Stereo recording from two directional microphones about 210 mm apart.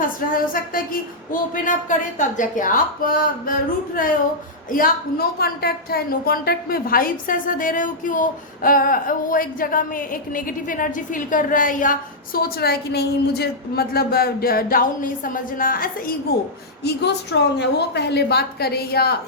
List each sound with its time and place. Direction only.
0.3 s a woman's voice: 40° left (ahead or behind)
16.8 s a woman's voice: 55° left (ahead or behind)